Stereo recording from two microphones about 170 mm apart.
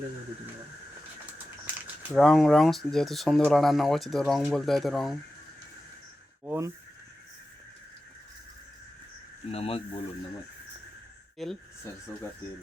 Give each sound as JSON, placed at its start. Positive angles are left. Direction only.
{"t": 2.1, "sound": "speech", "side_deg": 0}
{"t": 6.4, "sound": "a sound", "side_deg": -15}
{"t": 9.5, "sound": "speech", "side_deg": 35}
{"t": 11.4, "sound": "speech", "side_deg": 0}